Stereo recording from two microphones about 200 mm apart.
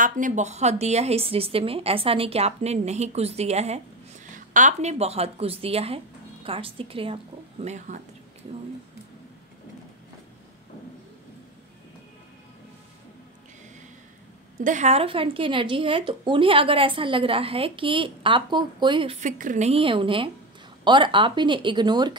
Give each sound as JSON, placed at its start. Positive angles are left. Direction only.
{"t": 0.0, "sound": "a woman's voice", "side_deg": -40}
{"t": 14.6, "sound": "a woman's voice", "side_deg": -35}
{"t": 19.1, "sound": "a woman's voice", "side_deg": -40}